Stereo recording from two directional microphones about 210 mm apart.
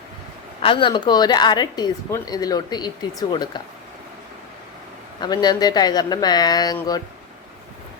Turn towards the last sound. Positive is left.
turn(degrees=20)  # may be behind; listen again after turning